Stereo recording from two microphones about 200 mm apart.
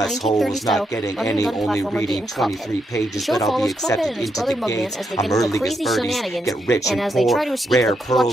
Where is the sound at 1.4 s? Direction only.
Centre (ahead or behind).